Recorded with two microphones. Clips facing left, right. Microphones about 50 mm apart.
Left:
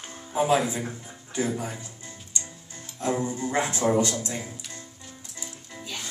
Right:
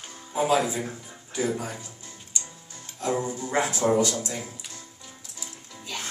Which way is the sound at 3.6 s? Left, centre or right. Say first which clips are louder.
Right 1 dB; left.